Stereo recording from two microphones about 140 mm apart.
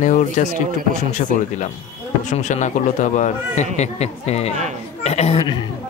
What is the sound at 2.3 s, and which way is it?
A man's voice, 55° left (ahead or behind).